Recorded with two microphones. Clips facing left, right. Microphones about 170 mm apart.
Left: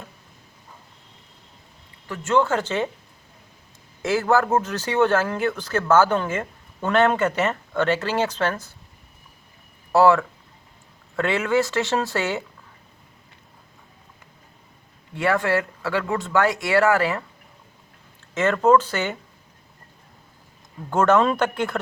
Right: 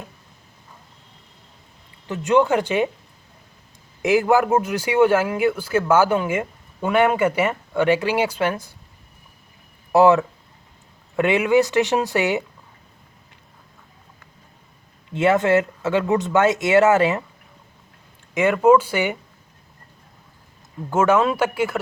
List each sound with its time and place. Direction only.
2.0 s speech: 20° right (ahead or behind)
4.0 s speech: 15° right (ahead or behind)
9.9 s speech: 20° right (ahead or behind)
15.1 s speech: 20° right (ahead or behind)
18.3 s speech: 10° right (ahead or behind)
20.9 s speech: 5° right (ahead or behind)